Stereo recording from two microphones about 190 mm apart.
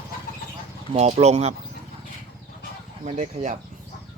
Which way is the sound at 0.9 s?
35° right (ahead or behind).